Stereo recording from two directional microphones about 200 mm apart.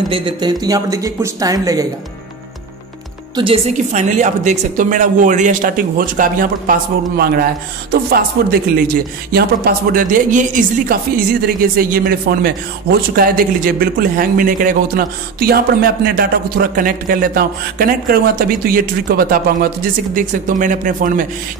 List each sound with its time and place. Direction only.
0.1 s speech: 25° right (ahead or behind)
3.3 s a woman's voice: 30° right (ahead or behind)